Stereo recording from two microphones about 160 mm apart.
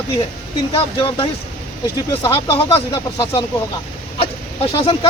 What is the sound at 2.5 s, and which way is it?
Speech, 25° left (ahead or behind).